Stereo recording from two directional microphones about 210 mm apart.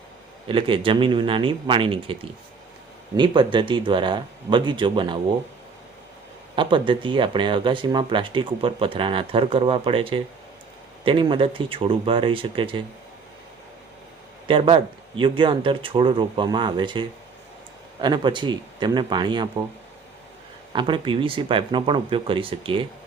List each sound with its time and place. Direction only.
0.4 s speech: 25° right (ahead or behind)
3.2 s speech: 20° right (ahead or behind)
6.6 s speech: 25° right (ahead or behind)
14.4 s speech: 25° right (ahead or behind)
20.7 s speech: 25° right (ahead or behind)